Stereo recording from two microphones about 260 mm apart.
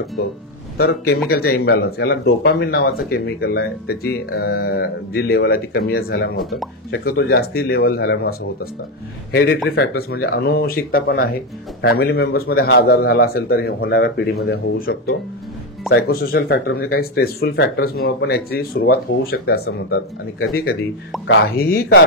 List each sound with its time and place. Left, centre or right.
0.7 s a man's voice: left